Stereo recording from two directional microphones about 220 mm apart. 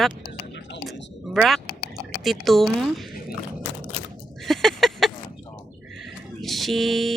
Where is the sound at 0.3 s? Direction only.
55° left (ahead or behind).